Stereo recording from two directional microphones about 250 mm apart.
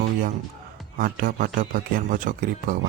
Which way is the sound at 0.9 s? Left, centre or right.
Right.